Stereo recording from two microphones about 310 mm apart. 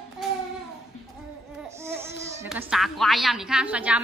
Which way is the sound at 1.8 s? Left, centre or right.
Centre.